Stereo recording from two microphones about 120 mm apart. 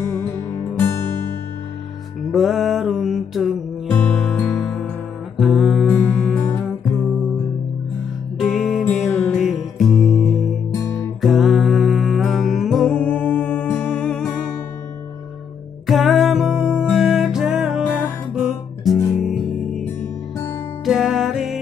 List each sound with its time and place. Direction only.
2.3 s mantra: centre (ahead or behind)
3.9 s music: 10° left (ahead or behind)
8.4 s music: centre (ahead or behind)
10.7 s music: 25° left (ahead or behind)
11.1 s music: centre (ahead or behind)
15.9 s music: centre (ahead or behind)
20.8 s music: centre (ahead or behind)